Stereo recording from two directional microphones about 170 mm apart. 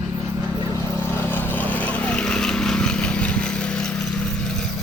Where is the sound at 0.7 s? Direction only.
15° left (ahead or behind).